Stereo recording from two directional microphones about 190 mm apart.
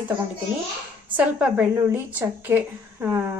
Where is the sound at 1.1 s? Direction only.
10° right (ahead or behind).